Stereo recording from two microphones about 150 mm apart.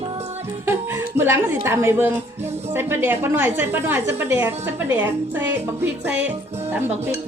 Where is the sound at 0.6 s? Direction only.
15° right (ahead or behind).